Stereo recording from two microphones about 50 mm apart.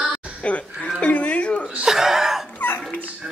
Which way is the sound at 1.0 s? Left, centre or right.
Left.